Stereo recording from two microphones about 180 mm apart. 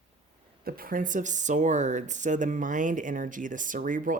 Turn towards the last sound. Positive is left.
turn(degrees=-50)  # may be behind; listen again after turning